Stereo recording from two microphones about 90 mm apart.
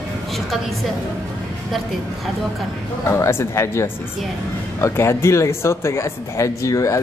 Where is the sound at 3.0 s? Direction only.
30° left (ahead or behind).